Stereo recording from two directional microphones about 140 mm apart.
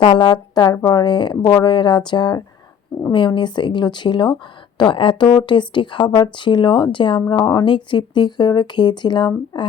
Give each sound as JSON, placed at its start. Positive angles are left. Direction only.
{"t": 0.0, "sound": "speech", "side_deg": 30}